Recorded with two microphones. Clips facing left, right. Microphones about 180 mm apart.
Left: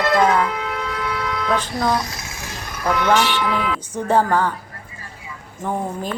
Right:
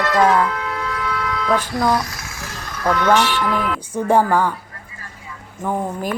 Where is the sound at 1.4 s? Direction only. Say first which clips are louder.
Right 3 dB; 10° right (ahead or behind).